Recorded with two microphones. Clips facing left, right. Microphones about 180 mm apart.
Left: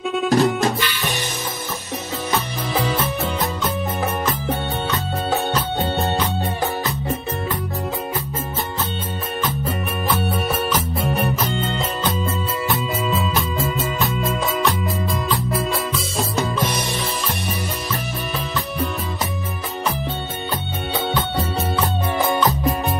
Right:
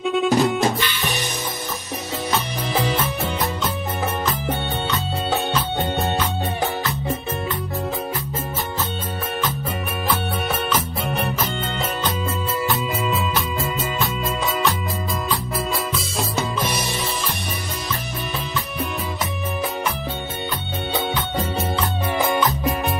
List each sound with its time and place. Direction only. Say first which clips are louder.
0.3 s music: left 3 dB; 20° right (ahead or behind)
10.0 s music: left 2 dB; centre (ahead or behind)
16.3 s music: left 2 dB; centre (ahead or behind)
20.9 s music: left 2 dB; 20° right (ahead or behind)